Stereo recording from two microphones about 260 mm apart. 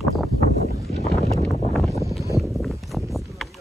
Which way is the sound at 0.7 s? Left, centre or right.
Left.